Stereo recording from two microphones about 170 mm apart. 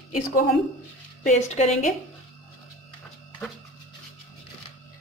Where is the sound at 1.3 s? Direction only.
45° left (ahead or behind).